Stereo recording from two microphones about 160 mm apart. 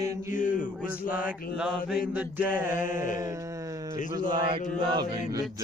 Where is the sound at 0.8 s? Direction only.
10° right (ahead or behind).